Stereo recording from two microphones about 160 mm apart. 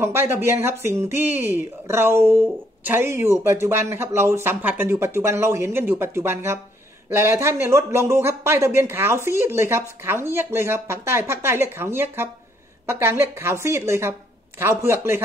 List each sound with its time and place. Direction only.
0.0 s speech: 15° right (ahead or behind)